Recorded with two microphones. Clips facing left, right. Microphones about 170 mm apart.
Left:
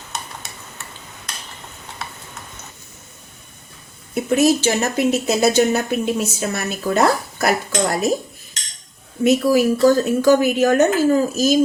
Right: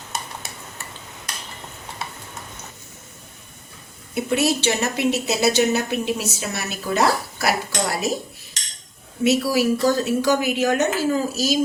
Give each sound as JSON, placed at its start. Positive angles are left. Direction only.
{"t": 4.1, "sound": "speech", "side_deg": 45}
{"t": 9.2, "sound": "speech", "side_deg": 50}